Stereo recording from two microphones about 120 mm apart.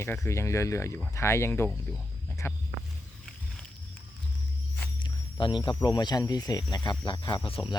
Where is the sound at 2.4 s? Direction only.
20° left (ahead or behind).